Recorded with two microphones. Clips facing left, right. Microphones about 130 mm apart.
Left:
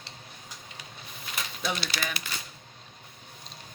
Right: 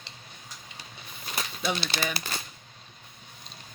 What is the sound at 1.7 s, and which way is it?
Speech, 30° right (ahead or behind).